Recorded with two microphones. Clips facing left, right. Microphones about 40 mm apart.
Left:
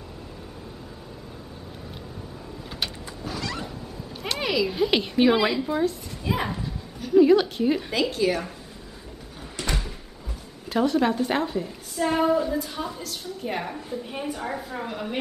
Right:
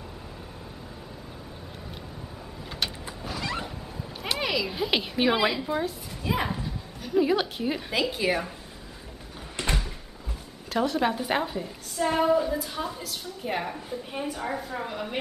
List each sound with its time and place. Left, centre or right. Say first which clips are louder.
3.3 s vehicle: left 1 dB; centre
4.2 s a woman's voice: left 3 dB; centre
8.1 s a woman's voice: left 2 dB; centre
9.6 s door: even; right
10.7 s a woman's voice: left 3 dB; centre